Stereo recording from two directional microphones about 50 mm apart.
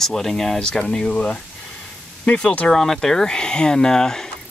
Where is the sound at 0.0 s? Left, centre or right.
Centre.